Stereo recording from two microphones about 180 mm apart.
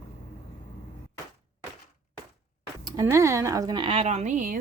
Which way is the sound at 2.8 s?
25° right (ahead or behind).